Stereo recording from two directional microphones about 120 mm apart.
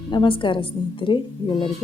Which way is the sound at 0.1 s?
40° left (ahead or behind).